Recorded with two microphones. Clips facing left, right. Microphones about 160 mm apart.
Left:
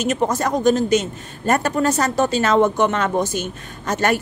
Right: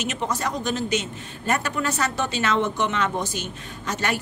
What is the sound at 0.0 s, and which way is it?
A man's voice, 45° left (ahead or behind).